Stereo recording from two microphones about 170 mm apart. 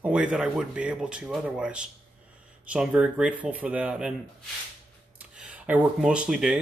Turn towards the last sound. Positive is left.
turn(degrees=-5)  # may be behind; listen again after turning